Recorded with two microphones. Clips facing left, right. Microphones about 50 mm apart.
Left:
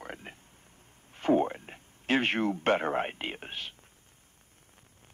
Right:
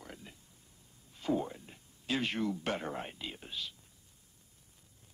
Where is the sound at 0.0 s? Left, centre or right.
Left.